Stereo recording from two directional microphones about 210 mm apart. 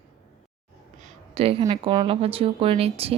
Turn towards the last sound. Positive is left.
turn(degrees=-30)  # may be behind; listen again after turning